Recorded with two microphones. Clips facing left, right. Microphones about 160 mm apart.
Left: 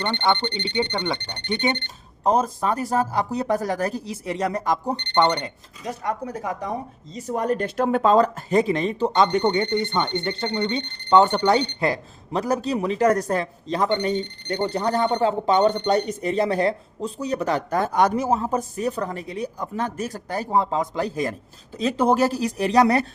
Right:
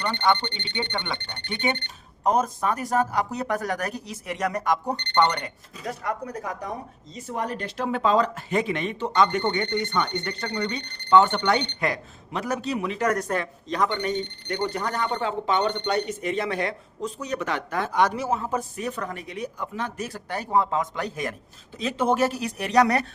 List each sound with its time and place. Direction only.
0.0 s speech: 30° left (ahead or behind)
7.3 s speech: 45° left (ahead or behind)
9.4 s speech: 20° left (ahead or behind)